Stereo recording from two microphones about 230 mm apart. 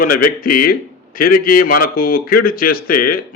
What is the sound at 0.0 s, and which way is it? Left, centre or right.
Speech, left.